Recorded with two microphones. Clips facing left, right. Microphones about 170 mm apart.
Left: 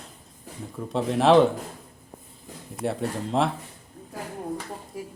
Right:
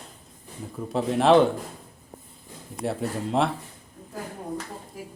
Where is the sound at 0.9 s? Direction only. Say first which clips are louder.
Even; centre (ahead or behind).